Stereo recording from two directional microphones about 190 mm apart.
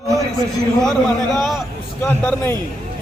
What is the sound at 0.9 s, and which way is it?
Speech, centre (ahead or behind).